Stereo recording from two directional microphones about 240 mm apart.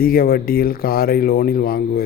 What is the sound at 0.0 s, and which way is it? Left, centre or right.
Speech, left.